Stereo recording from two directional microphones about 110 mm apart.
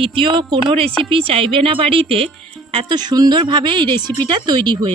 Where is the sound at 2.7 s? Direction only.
40° right (ahead or behind).